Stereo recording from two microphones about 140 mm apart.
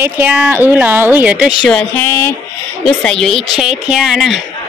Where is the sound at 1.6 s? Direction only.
5° left (ahead or behind).